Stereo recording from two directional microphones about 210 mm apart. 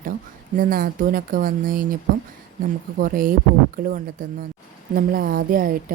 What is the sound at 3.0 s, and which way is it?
Speech, 40° right (ahead or behind).